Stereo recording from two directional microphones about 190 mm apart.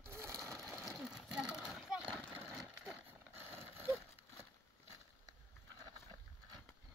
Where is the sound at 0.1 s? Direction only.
15° right (ahead or behind).